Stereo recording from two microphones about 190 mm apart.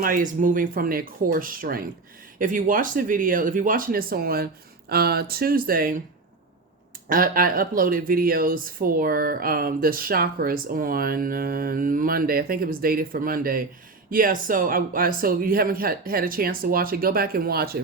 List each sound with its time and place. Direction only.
0.0 s speech: 45° right (ahead or behind)
7.1 s speech: 50° right (ahead or behind)